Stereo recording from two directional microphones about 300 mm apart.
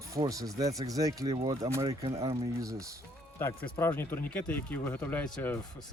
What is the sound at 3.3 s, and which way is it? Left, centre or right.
Speech, centre.